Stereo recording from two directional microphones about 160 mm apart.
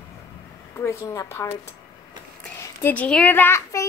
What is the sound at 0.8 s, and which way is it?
Speech, 20° left (ahead or behind).